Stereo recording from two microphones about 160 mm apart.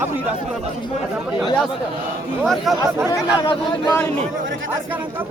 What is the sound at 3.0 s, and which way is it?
Speech, 25° left (ahead or behind).